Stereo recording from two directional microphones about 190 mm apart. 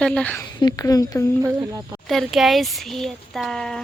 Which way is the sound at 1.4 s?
15° right (ahead or behind).